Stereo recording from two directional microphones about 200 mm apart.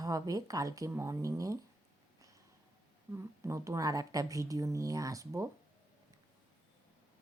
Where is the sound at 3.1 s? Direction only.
15° right (ahead or behind).